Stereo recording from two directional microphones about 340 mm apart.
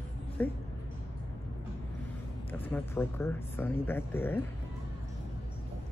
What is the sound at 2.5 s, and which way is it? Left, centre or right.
Speech, centre.